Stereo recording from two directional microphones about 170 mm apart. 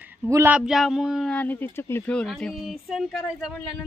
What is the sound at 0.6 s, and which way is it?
Speech, centre (ahead or behind).